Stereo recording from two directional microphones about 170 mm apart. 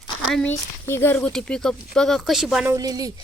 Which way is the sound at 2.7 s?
20° right (ahead or behind).